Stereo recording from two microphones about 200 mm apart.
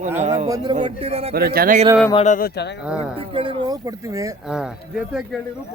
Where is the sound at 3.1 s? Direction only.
25° right (ahead or behind).